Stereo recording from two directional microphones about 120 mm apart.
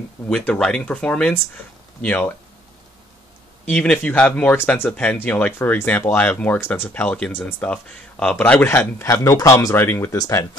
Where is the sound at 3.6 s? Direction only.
10° left (ahead or behind).